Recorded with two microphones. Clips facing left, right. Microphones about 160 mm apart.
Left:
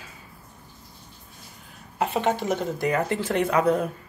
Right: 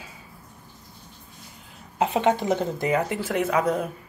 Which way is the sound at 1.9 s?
20° right (ahead or behind).